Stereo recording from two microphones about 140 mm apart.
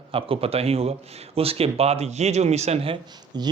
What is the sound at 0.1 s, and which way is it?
A man's voice, 40° right (ahead or behind).